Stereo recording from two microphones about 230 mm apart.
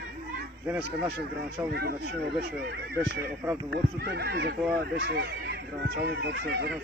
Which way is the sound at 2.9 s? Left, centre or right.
Centre.